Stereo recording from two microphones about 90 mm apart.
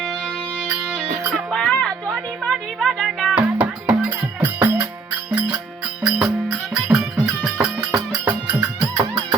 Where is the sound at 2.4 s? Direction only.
Centre (ahead or behind).